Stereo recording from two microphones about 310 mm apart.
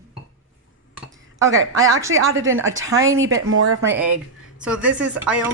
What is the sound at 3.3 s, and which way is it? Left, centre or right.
Speech, right.